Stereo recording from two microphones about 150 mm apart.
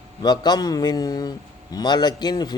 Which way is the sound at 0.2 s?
30° left (ahead or behind).